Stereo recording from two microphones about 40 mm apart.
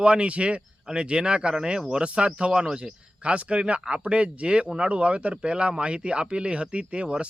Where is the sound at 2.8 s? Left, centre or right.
Right.